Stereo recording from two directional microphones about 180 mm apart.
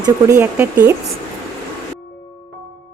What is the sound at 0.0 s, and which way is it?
Speech, 20° right (ahead or behind).